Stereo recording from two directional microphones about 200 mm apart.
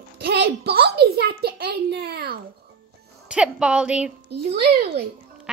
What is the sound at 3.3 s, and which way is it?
Speech, 5° right (ahead or behind).